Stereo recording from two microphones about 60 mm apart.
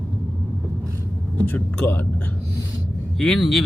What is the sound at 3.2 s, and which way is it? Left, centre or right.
Speech, centre.